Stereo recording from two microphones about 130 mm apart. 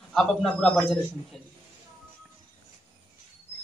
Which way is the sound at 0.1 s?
5° left (ahead or behind).